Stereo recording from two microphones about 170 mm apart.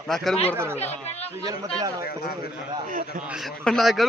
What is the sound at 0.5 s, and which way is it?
Speech, 15° right (ahead or behind).